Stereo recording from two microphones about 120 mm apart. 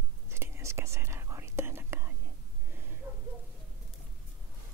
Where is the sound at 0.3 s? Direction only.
20° right (ahead or behind).